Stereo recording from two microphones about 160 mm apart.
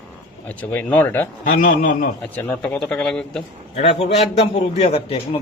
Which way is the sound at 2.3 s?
10° left (ahead or behind).